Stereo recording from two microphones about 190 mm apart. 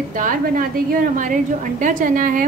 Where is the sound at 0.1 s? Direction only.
45° right (ahead or behind).